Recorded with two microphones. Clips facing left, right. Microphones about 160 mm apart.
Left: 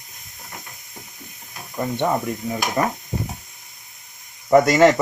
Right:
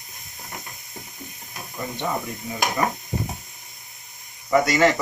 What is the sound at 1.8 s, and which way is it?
Speech, 50° left (ahead or behind).